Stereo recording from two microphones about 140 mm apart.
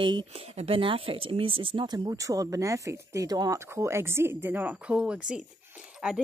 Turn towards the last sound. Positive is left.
turn(degrees=-5)  # may be behind; listen again after turning